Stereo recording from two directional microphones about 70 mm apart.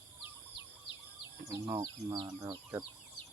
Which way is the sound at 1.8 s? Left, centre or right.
Right.